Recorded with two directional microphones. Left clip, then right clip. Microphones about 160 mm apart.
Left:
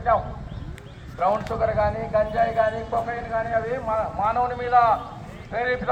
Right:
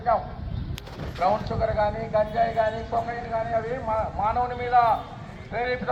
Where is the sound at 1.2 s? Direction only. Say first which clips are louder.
Left 2 dB; 10° left (ahead or behind).